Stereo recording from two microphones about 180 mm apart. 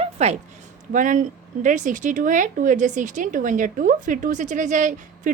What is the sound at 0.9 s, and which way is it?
A woman's voice, 45° right (ahead or behind).